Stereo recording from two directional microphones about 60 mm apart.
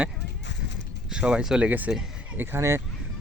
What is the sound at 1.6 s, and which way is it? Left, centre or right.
Speech, right.